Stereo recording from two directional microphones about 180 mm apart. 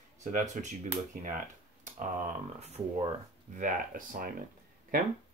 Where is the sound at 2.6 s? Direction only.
30° right (ahead or behind).